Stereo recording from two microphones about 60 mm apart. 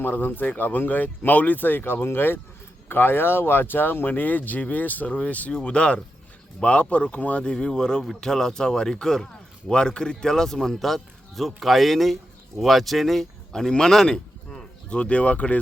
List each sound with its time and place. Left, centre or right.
0.0 s speech: left